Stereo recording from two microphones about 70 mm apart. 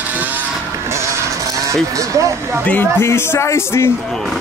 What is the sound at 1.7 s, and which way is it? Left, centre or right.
Speech, right.